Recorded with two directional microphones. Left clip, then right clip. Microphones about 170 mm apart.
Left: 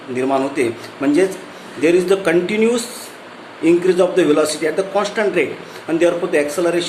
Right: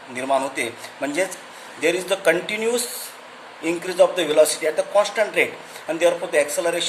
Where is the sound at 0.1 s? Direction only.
25° right (ahead or behind).